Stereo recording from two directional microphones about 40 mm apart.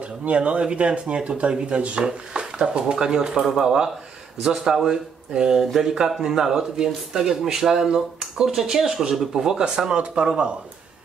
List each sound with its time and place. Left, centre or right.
0.0 s speech: right